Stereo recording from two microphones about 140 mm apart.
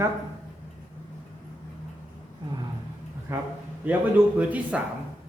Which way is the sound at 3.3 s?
15° right (ahead or behind).